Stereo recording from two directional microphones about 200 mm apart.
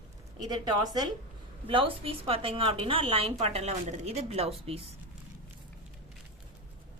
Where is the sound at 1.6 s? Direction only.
25° right (ahead or behind).